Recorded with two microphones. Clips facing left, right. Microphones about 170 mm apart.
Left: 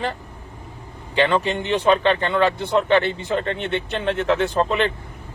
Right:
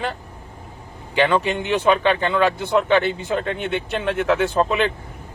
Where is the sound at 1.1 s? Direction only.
5° right (ahead or behind).